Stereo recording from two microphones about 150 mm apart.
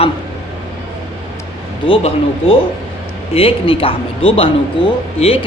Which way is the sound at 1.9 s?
40° left (ahead or behind).